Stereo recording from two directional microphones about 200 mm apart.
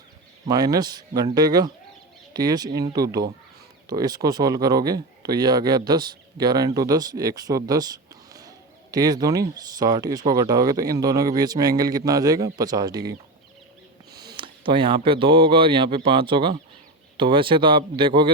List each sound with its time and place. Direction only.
0.4 s speech: 20° right (ahead or behind)
14.2 s speech: 20° right (ahead or behind)